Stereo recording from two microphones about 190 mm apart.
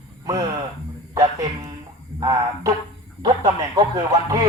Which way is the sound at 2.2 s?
20° right (ahead or behind).